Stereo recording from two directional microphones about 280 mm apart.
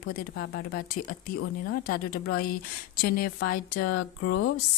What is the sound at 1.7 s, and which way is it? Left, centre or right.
Speech, left.